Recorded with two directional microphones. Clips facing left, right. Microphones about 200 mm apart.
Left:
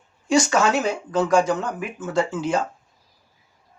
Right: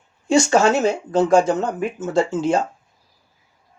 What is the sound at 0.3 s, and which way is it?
Speech, 25° right (ahead or behind).